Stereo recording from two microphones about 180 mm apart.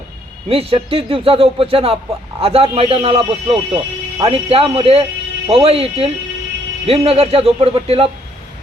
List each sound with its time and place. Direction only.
0.4 s speech: 30° right (ahead or behind)